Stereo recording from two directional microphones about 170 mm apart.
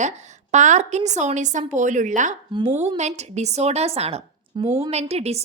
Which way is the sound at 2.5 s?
30° right (ahead or behind).